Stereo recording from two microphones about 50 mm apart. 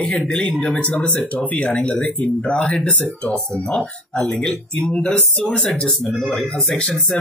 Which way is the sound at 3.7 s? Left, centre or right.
Centre.